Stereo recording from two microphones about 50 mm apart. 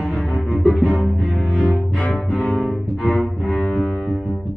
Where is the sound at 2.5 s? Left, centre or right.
Centre.